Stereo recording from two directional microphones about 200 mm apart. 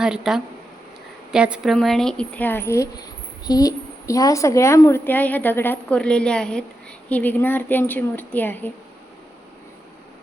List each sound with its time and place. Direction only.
0.0 s a woman's voice: 5° right (ahead or behind)